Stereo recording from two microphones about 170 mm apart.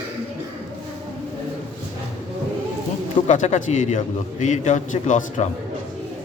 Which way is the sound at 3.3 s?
45° left (ahead or behind).